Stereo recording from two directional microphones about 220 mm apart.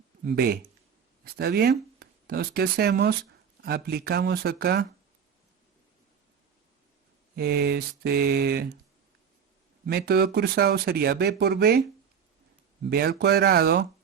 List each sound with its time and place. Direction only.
0.3 s speech: 45° right (ahead or behind)
7.3 s speech: 45° right (ahead or behind)
9.8 s speech: 45° right (ahead or behind)
12.8 s speech: 45° right (ahead or behind)